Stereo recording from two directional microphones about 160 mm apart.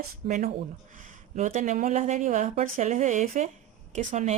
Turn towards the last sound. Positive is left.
turn(degrees=-45)  # may be behind; listen again after turning